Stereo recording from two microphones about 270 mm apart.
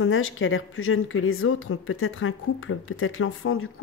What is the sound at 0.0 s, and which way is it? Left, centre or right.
A woman's voice, left.